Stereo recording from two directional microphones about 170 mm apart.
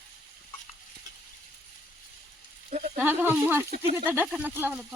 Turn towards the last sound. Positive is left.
turn(degrees=-10)  # may be behind; listen again after turning